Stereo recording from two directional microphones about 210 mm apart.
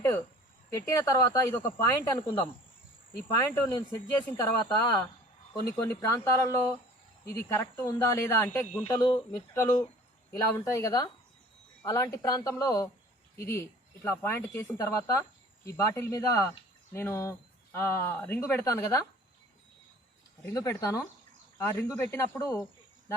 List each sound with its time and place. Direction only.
0.7 s speech: 15° left (ahead or behind)
20.5 s speech: 15° left (ahead or behind)